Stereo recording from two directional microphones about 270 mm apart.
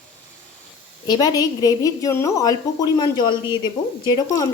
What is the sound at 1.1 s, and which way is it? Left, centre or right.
Speech, centre.